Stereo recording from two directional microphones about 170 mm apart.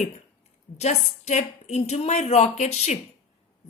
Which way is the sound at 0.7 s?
40° left (ahead or behind).